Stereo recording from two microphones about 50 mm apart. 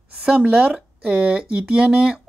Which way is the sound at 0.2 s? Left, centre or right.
Right.